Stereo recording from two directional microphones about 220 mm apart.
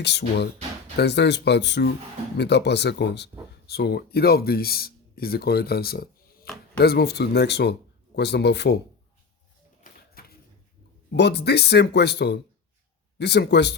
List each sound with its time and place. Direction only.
0.0 s speech: 50° left (ahead or behind)
9.8 s a sound: 45° left (ahead or behind)
11.1 s speech: 50° left (ahead or behind)